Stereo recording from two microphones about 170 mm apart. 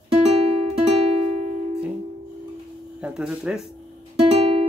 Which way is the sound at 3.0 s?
5° right (ahead or behind).